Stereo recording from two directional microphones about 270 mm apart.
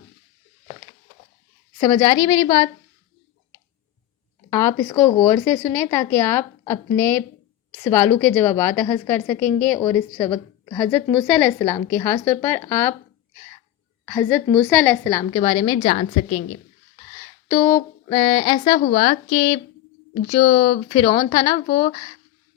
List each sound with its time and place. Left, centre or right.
1.8 s speech: centre
4.4 s speech: centre
14.0 s speech: centre
17.5 s speech: centre
21.7 s speech: left